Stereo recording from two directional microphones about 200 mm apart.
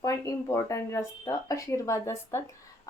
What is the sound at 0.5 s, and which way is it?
A woman's voice, 15° left (ahead or behind).